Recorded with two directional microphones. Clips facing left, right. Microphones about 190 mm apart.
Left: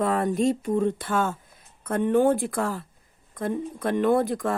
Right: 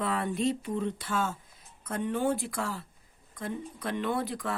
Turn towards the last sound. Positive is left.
turn(degrees=50)  # may be behind; listen again after turning